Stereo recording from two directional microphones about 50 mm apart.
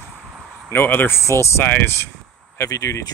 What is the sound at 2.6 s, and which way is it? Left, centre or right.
Speech, left.